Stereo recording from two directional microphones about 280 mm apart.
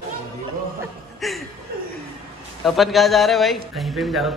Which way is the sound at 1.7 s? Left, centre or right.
Right.